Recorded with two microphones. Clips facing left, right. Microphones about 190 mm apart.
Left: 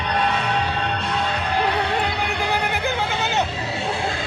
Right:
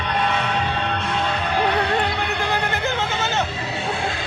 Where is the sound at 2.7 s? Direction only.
15° left (ahead or behind).